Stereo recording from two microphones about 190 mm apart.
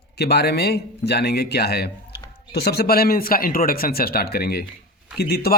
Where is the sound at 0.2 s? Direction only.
60° left (ahead or behind).